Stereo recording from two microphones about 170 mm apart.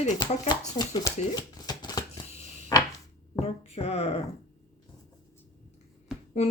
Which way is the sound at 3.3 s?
40° left (ahead or behind).